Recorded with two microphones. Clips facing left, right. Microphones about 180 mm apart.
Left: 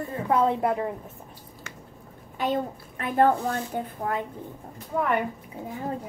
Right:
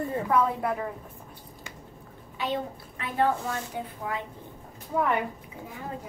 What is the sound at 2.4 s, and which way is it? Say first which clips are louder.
A woman's voice: left 4 dB; 50° left (ahead or behind).